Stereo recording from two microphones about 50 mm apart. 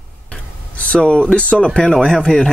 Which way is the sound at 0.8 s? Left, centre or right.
Left.